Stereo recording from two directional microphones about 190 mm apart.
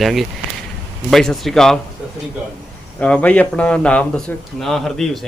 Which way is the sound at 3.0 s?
5° left (ahead or behind).